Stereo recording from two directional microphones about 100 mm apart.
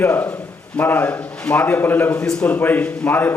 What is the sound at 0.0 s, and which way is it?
A man's voice, 20° left (ahead or behind).